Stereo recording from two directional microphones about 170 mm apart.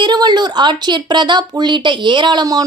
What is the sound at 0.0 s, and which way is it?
Speech, 25° right (ahead or behind).